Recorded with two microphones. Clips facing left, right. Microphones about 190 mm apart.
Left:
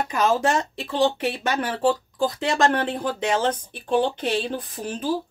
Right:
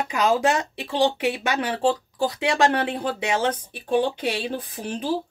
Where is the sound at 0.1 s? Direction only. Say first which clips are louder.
Right 1 dB; 15° right (ahead or behind).